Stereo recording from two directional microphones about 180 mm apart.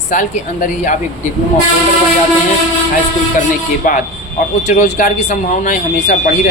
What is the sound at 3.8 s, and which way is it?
A man's voice, 50° left (ahead or behind).